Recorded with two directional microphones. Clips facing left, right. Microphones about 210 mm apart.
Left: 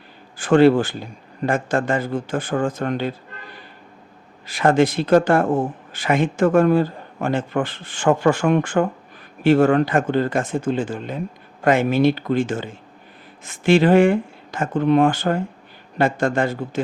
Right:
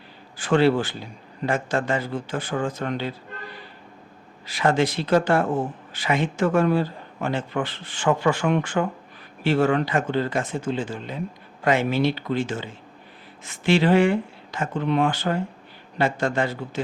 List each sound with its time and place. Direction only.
0.3 s speech: 50° left (ahead or behind)
4.4 s speech: 50° left (ahead or behind)